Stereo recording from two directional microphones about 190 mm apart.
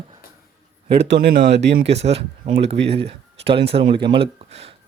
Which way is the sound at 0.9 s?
60° right (ahead or behind).